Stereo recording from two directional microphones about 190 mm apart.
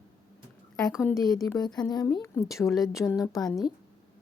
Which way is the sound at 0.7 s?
Centre (ahead or behind).